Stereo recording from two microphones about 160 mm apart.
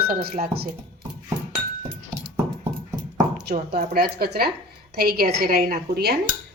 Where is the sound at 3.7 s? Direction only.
65° right (ahead or behind).